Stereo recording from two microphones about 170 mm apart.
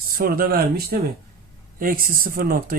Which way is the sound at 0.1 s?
60° right (ahead or behind).